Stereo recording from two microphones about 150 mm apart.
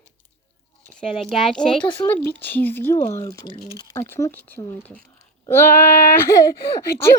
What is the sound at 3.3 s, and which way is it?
Speech, 25° left (ahead or behind).